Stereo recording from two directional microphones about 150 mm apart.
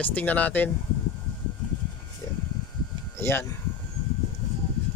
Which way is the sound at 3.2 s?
15° left (ahead or behind).